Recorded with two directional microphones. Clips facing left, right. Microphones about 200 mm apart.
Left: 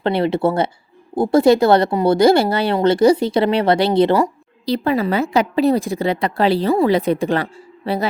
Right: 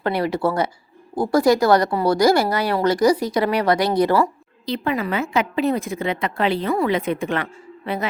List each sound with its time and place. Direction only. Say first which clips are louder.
0.0 s speech: left 4 dB; 25° left (ahead or behind)
4.6 s a woman's voice: left 5 dB; 35° left (ahead or behind)